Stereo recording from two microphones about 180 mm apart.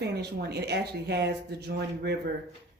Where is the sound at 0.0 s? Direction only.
65° right (ahead or behind).